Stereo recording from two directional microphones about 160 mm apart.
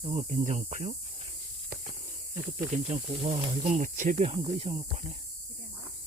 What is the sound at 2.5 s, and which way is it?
Speech, 45° right (ahead or behind).